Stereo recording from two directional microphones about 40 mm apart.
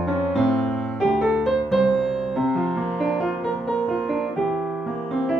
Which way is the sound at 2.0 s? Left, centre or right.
Centre.